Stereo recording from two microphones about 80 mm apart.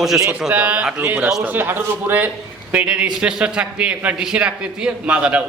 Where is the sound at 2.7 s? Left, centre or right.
Centre.